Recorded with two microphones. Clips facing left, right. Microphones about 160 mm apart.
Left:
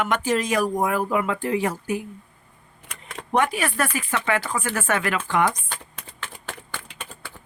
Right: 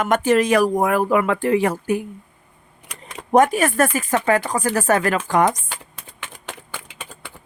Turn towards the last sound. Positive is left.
turn(degrees=-15)  # may be behind; listen again after turning